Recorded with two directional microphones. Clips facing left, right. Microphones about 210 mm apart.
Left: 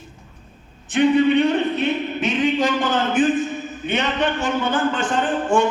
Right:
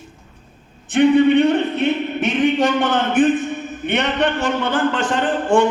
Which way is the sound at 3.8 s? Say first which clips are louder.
Right 3 dB; 65° right (ahead or behind).